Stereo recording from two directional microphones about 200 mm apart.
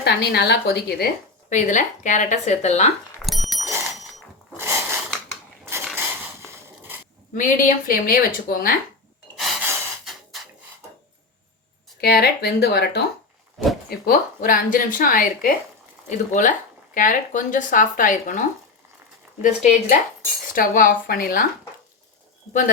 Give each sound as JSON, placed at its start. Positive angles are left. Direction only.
{"t": 0.0, "sound": "a woman's voice", "side_deg": 55}
{"t": 1.5, "sound": "speech", "side_deg": 40}
{"t": 3.2, "sound": "bicycle bell", "side_deg": 0}
{"t": 4.5, "sound": "a sound", "side_deg": -10}
{"t": 6.0, "sound": "a sound", "side_deg": -15}
{"t": 7.3, "sound": "speech", "side_deg": 40}
{"t": 9.4, "sound": "gasp", "side_deg": -5}
{"t": 11.9, "sound": "speech", "side_deg": 55}
{"t": 13.6, "sound": "speech", "side_deg": 0}
{"t": 13.9, "sound": "speech", "side_deg": 45}